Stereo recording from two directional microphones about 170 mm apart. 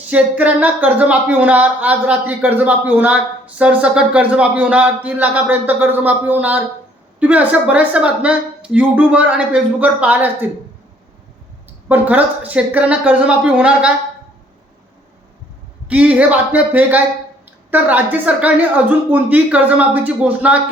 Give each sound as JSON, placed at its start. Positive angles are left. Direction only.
{"t": 0.1, "sound": "speech", "side_deg": -10}
{"t": 11.9, "sound": "speech", "side_deg": -10}
{"t": 15.9, "sound": "speech", "side_deg": -10}